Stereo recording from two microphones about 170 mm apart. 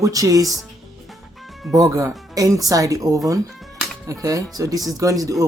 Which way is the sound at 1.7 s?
20° right (ahead or behind).